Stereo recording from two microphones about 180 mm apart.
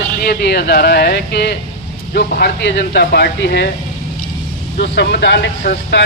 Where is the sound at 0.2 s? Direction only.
60° left (ahead or behind).